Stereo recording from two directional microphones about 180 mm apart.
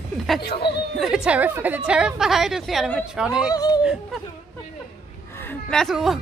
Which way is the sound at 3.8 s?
5° right (ahead or behind).